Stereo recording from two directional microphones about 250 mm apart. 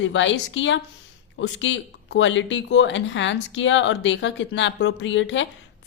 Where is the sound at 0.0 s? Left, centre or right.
Left.